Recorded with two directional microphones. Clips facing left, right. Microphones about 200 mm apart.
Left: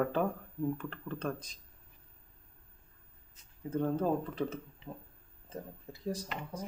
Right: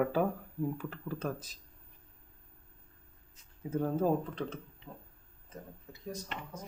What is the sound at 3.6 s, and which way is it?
Speech, 10° right (ahead or behind).